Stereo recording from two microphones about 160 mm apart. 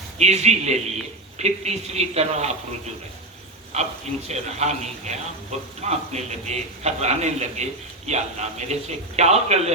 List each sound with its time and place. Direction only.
0.2 s a man's voice: 45° right (ahead or behind)
4.3 s a man's voice: 45° right (ahead or behind)